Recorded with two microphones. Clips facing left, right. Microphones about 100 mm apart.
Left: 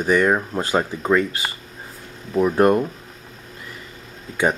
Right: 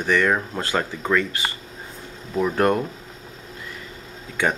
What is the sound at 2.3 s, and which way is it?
Speech, 10° left (ahead or behind).